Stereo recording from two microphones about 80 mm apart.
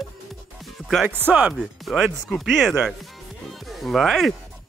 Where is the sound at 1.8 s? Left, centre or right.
Centre.